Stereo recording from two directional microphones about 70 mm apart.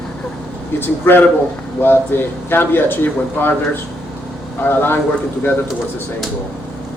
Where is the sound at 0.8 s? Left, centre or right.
Left.